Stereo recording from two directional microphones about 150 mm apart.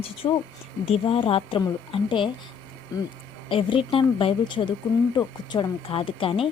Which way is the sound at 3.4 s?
35° left (ahead or behind).